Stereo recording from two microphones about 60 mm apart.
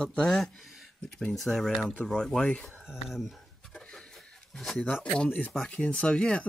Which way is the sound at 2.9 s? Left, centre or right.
Centre.